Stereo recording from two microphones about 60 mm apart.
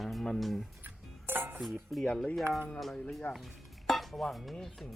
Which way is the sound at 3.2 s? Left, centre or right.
Left.